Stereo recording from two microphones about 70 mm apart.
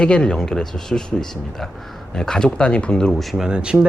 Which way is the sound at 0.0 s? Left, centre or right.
Centre.